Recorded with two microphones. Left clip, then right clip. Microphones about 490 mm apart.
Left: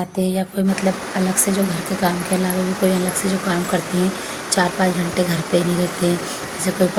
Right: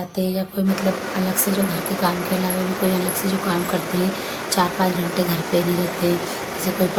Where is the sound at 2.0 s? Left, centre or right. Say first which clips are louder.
Left 1 dB; right.